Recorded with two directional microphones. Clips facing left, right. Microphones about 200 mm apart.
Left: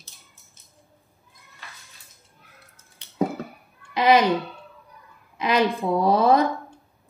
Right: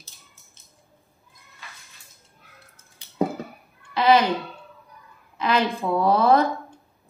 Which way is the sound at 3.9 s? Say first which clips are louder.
Even; 15° left (ahead or behind).